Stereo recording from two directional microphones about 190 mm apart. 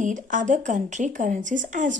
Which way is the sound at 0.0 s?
45° right (ahead or behind).